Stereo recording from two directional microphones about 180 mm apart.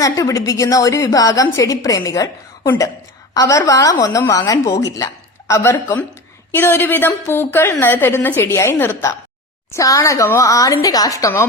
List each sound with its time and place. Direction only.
0.0 s a woman's voice: 20° left (ahead or behind)